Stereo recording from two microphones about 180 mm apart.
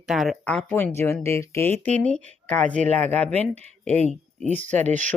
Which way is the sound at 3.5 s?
35° right (ahead or behind).